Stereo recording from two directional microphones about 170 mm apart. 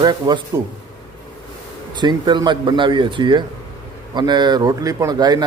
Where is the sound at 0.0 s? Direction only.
25° right (ahead or behind).